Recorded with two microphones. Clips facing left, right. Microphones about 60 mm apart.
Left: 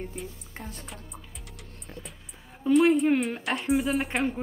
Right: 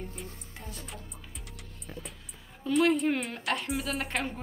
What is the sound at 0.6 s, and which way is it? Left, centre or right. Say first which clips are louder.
Music: left 4 dB; left.